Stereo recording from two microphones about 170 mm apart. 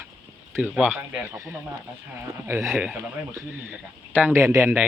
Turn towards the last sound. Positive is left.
turn(degrees=-15)  # may be behind; listen again after turning